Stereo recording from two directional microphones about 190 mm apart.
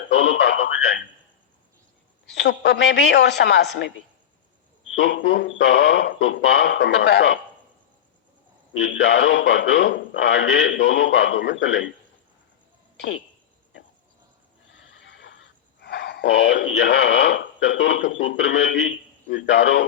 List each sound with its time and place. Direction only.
0.1 s speech: 90° left
2.4 s speech: 65° left (ahead or behind)
4.9 s a man's voice: 70° left (ahead or behind)
8.7 s a man's voice: 85° left
15.0 s neigh: 75° left (ahead or behind)
15.8 s speech: 60° left (ahead or behind)